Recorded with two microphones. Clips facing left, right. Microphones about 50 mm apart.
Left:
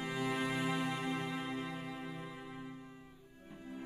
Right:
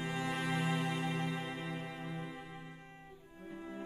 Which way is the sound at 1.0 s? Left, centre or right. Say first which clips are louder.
Right 1 dB; right.